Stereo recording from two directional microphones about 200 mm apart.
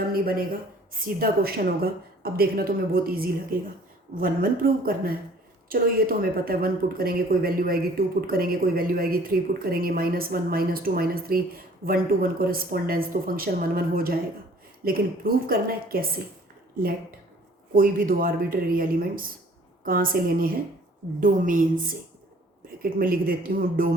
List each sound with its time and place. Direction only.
0.1 s speech: 50° right (ahead or behind)
17.7 s a woman's voice: 45° right (ahead or behind)